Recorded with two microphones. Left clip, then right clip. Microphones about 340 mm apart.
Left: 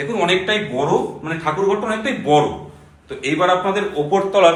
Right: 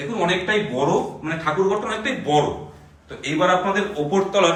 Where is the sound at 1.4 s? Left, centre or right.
Centre.